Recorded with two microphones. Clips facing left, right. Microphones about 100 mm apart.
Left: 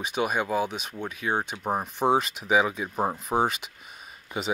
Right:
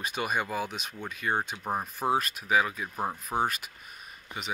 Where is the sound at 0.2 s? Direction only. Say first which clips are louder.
Left 5 dB; 5° left (ahead or behind).